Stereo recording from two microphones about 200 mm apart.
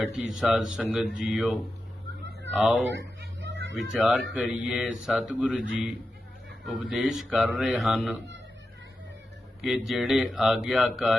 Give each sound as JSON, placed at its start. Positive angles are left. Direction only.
{"t": 0.0, "sound": "speech", "side_deg": 0}
{"t": 3.2, "sound": "music", "side_deg": -60}
{"t": 3.8, "sound": "speech", "side_deg": -5}
{"t": 6.7, "sound": "speech", "side_deg": -5}
{"t": 9.6, "sound": "speech", "side_deg": 0}